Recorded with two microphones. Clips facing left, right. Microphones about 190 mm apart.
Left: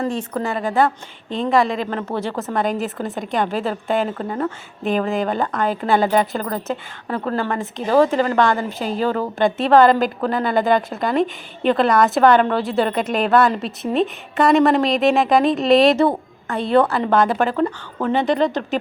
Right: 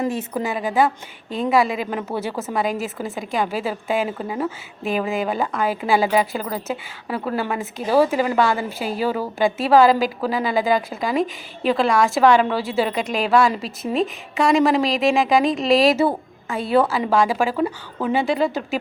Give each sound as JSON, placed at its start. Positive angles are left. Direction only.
{"t": 0.0, "sound": "a woman's voice", "side_deg": -10}